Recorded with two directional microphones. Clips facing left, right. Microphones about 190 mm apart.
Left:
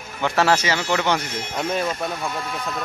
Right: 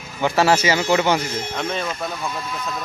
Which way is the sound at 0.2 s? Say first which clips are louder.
Right 2 dB; 5° right (ahead or behind).